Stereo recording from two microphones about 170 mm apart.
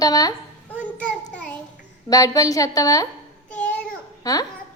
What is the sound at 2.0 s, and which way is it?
A woman's voice, 20° left (ahead or behind).